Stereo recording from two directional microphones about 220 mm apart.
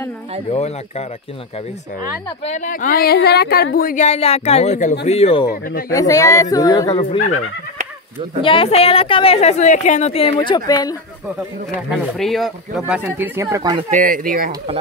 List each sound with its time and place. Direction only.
0.5 s a woman's voice: 30° left (ahead or behind)
2.4 s a woman's voice: 35° left (ahead or behind)
5.5 s speech: 45° left (ahead or behind)
5.9 s a man's voice: 15° left (ahead or behind)
8.4 s a woman's voice: 25° left (ahead or behind)
12.2 s speech: centre (ahead or behind); by 13.8 s 20° right (ahead or behind)
13.8 s speech: 35° right (ahead or behind)